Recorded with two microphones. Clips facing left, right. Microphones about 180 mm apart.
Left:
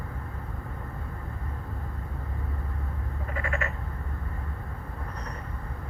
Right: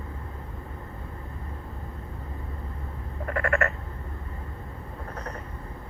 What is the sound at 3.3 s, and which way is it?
Frog, 65° right (ahead or behind).